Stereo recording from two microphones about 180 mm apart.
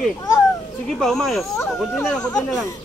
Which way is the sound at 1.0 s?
Centre (ahead or behind).